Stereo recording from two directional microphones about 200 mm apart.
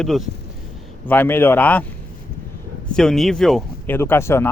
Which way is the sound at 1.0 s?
10° left (ahead or behind).